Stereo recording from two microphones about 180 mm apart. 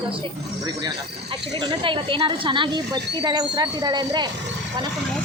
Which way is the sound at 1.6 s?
25° right (ahead or behind).